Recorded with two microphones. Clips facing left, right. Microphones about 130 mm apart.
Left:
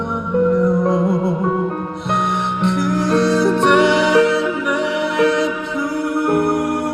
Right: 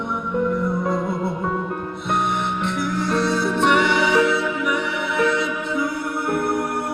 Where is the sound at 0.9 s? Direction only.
20° left (ahead or behind).